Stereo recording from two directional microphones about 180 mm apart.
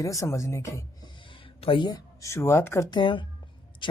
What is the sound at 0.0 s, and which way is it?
A woman's voice, 20° left (ahead or behind).